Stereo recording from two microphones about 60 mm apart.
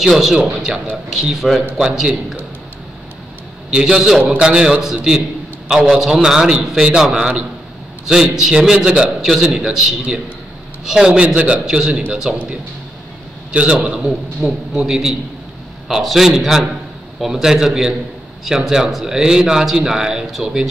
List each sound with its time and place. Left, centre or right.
0.0 s a man's voice: centre
3.7 s a man's voice: centre
13.5 s a man's voice: right